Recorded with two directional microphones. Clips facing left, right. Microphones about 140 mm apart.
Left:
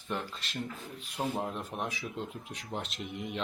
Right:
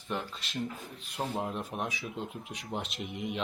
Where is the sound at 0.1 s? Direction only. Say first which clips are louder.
Right 1 dB; 5° right (ahead or behind).